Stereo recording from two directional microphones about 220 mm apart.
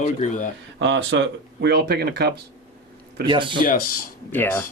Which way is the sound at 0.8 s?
55° right (ahead or behind).